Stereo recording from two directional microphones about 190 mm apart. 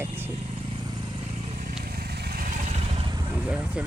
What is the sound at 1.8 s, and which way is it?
Vehicle, 55° right (ahead or behind).